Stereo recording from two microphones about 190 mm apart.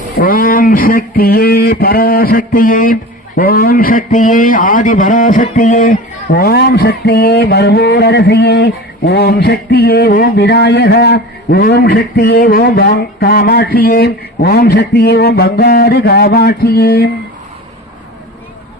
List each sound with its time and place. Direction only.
0.2 s speech: 50° left (ahead or behind)